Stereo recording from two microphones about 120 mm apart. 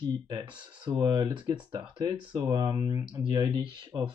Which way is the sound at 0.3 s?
35° right (ahead or behind).